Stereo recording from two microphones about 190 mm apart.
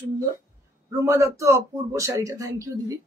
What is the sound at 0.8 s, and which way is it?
Speech, 15° right (ahead or behind).